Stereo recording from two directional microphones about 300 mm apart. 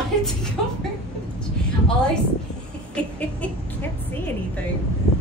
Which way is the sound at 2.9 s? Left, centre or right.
Centre.